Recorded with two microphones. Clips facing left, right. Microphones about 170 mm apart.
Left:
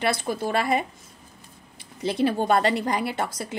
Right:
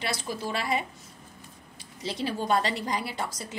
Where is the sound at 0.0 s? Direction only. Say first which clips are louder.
Left 7 dB; 60° left (ahead or behind).